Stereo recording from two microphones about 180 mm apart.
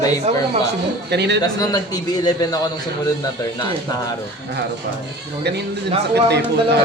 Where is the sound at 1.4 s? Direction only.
20° left (ahead or behind).